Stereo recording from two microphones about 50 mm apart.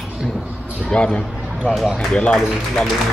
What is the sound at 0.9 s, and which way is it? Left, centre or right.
Speech, left.